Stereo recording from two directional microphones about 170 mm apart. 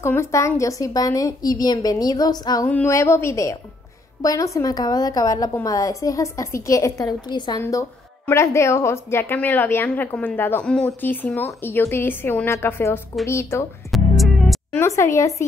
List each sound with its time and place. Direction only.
0.0 s a woman's voice: 15° left (ahead or behind)
13.9 s music: centre (ahead or behind)
14.7 s a woman's voice: 15° left (ahead or behind)